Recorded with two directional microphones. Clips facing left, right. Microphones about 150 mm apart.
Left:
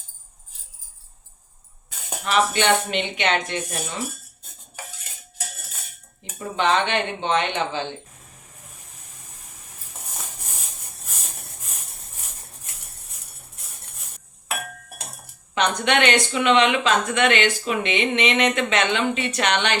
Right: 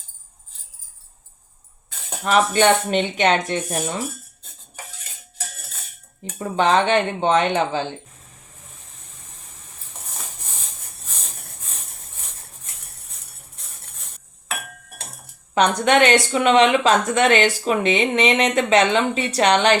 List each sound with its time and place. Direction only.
2.2 s speech: 40° right (ahead or behind)
6.6 s speech: 40° right (ahead or behind)
15.5 s speech: 40° right (ahead or behind)